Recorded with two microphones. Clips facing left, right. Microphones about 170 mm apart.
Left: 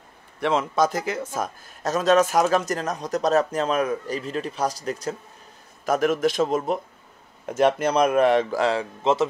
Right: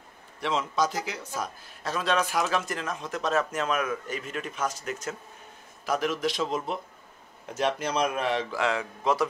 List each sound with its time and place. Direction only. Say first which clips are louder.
0.4 s a man's voice: left 6 dB; 55° left (ahead or behind); by 5.1 s 35° left (ahead or behind)
5.9 s speech: left 6 dB; 50° left (ahead or behind)
8.5 s a man's voice: left 5 dB; 30° left (ahead or behind)